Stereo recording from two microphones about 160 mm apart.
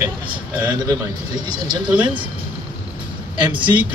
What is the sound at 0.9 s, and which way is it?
Speech, 25° right (ahead or behind).